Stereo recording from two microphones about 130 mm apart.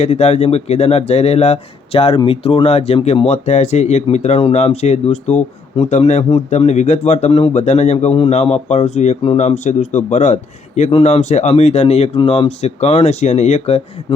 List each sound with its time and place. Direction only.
0.0 s speech: 55° left (ahead or behind)